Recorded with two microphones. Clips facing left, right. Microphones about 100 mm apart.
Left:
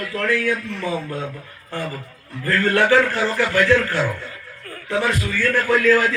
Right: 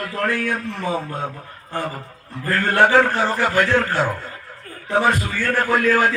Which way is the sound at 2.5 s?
45° right (ahead or behind).